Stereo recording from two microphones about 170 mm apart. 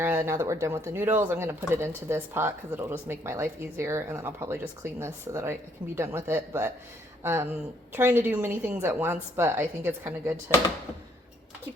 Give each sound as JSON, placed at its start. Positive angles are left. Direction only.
{"t": 0.0, "sound": "speech", "side_deg": -15}